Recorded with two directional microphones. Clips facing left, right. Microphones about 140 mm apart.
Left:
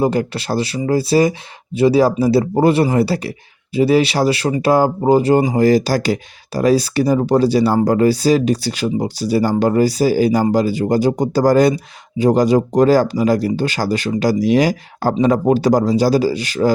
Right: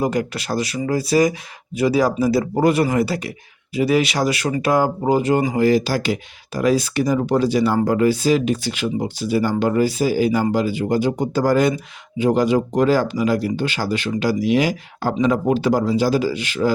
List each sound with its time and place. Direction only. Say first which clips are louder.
0.0 s speech: left 4 dB; 30° left (ahead or behind)